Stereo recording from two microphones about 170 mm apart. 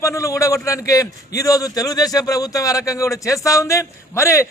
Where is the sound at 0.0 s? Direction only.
15° left (ahead or behind).